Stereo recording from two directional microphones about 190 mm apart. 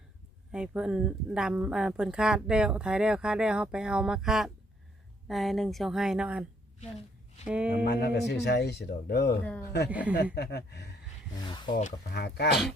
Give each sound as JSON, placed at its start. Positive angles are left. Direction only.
{"t": 0.5, "sound": "speech", "side_deg": -5}
{"t": 7.4, "sound": "speech", "side_deg": -5}
{"t": 7.9, "sound": "speech", "side_deg": 55}
{"t": 9.4, "sound": "speech", "side_deg": 10}
{"t": 9.9, "sound": "speech", "side_deg": -5}
{"t": 10.3, "sound": "speech", "side_deg": 60}
{"t": 11.4, "sound": "speech", "side_deg": 25}
{"t": 12.1, "sound": "speech", "side_deg": 60}